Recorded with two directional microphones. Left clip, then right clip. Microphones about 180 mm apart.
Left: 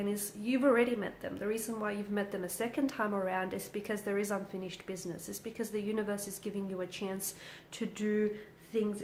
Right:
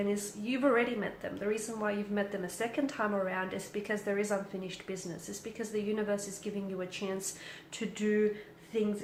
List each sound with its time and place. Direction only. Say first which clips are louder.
0.1 s a woman's voice: right 1 dB; 40° left (ahead or behind)